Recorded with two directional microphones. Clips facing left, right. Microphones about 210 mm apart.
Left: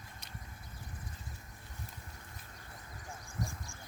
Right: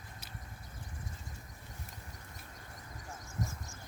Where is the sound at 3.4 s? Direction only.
20° right (ahead or behind).